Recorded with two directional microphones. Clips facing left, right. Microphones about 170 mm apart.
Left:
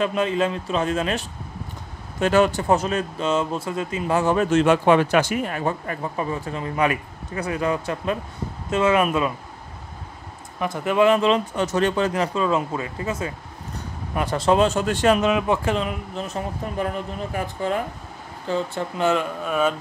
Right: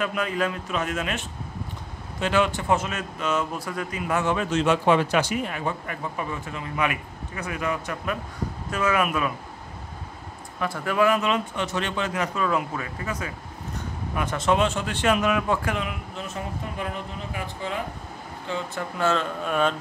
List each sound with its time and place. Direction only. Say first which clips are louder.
0.0 s speech: left 5 dB; 25° left (ahead or behind)
2.1 s a man's voice: left 5 dB; 45° left (ahead or behind); by 9.3 s 25° left (ahead or behind)
10.6 s a man's voice: left 4 dB; 20° left (ahead or behind); by 15.1 s 40° left (ahead or behind)
15.2 s speech: left 3 dB; 20° left (ahead or behind)
16.7 s a man's voice: left 6 dB; 45° left (ahead or behind)
18.9 s speech: left 3 dB; 15° left (ahead or behind)
19.4 s carnatic music: left 1 dB; 5° left (ahead or behind)